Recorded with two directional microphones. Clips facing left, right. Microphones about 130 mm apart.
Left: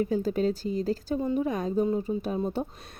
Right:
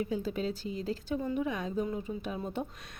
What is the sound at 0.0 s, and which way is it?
Speech, 45° left (ahead or behind).